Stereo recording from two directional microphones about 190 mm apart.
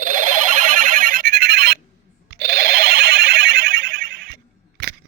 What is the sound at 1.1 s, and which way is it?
Music, 50° right (ahead or behind).